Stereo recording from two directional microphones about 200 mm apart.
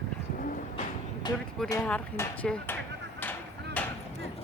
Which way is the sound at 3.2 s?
10° left (ahead or behind).